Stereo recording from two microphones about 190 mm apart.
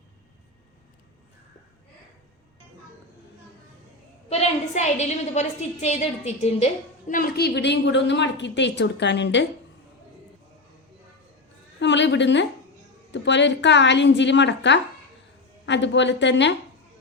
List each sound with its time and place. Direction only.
4.3 s a woman's voice: 35° left (ahead or behind)
7.1 s a woman's voice: 50° left (ahead or behind); by 9.5 s 70° left (ahead or behind)
11.8 s a sound: 70° left (ahead or behind)
13.1 s a woman's voice: 70° left (ahead or behind)